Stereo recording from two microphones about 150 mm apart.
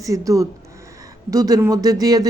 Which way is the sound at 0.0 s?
20° right (ahead or behind).